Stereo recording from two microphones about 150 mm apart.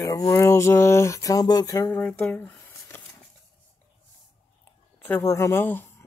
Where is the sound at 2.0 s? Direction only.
10° left (ahead or behind).